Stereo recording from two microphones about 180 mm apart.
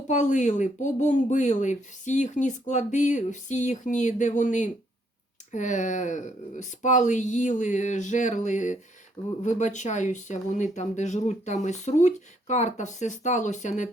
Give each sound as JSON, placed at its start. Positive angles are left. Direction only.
{"t": 0.1, "sound": "speech", "side_deg": 45}